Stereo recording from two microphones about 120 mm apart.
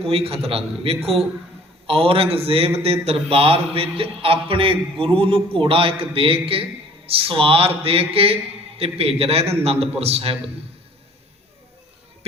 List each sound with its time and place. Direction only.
0.0 s a man's voice: 55° right (ahead or behind)